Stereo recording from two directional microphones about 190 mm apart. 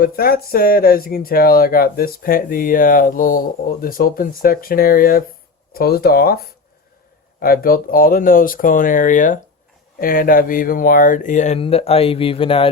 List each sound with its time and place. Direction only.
0.0 s speech: 55° left (ahead or behind); by 12.6 s 30° left (ahead or behind)